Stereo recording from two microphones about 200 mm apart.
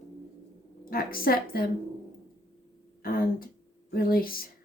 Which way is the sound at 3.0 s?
45° left (ahead or behind).